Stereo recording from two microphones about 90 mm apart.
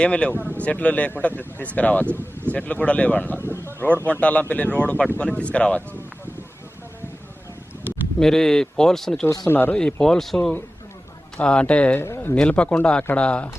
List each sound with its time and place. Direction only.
0.0 s speech: 10° left (ahead or behind)
2.0 s speech: 25° right (ahead or behind)
2.5 s speech: 15° left (ahead or behind)
3.7 s a sound: 25° left (ahead or behind)
4.0 s speech: 15° left (ahead or behind)
8.2 s speech: 5° left (ahead or behind)
9.5 s speech: 25° left (ahead or behind)
9.7 s speech: 5° left (ahead or behind)
11.9 s speech: 30° left (ahead or behind)
12.3 s speech: 10° left (ahead or behind)